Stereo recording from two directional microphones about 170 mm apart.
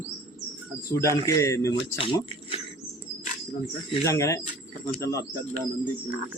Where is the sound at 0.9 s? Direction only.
20° left (ahead or behind).